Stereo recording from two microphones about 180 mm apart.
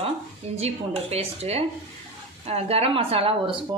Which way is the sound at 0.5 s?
35° right (ahead or behind).